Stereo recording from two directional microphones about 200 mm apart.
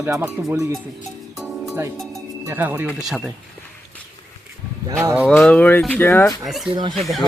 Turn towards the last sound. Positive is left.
turn(degrees=0)  # may be behind; listen again after turning